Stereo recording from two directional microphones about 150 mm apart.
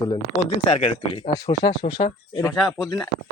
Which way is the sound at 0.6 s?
40° left (ahead or behind).